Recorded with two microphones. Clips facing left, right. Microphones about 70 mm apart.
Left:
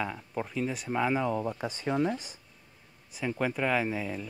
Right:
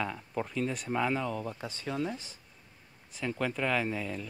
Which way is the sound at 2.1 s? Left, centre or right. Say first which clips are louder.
Left 5 dB; centre.